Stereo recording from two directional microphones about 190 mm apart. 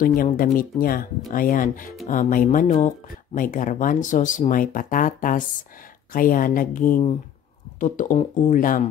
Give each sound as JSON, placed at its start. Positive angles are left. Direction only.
{"t": 0.0, "sound": "speech", "side_deg": 50}